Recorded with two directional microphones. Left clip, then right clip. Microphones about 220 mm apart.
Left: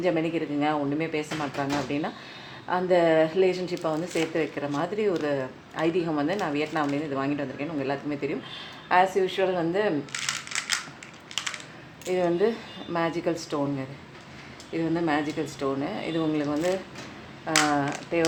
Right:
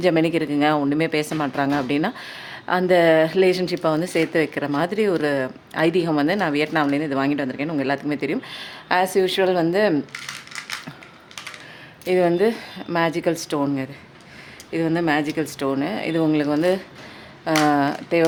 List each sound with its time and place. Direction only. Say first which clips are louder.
0.0 s speech: right 7 dB; 45° right (ahead or behind)
12.0 s speech: right 6 dB; 45° right (ahead or behind)